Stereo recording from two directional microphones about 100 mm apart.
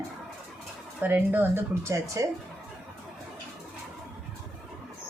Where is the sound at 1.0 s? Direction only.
20° right (ahead or behind).